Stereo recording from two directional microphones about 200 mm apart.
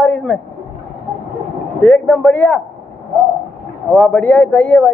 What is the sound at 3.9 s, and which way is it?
A man's voice, 5° left (ahead or behind).